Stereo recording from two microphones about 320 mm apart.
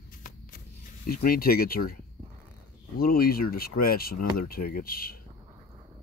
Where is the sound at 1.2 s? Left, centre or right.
Left.